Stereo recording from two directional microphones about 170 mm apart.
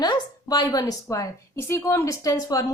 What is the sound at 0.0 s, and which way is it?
A woman's voice, 25° left (ahead or behind).